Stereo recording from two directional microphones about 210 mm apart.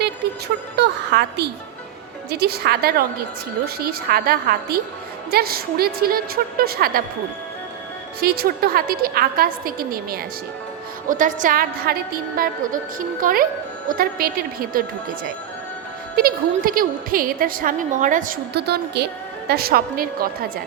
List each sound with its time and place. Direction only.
0.0 s a sound: 50° right (ahead or behind)
2.3 s a woman's voice: 50° right (ahead or behind)
8.2 s a woman's voice: 45° right (ahead or behind)
16.1 s a woman's voice: 45° right (ahead or behind)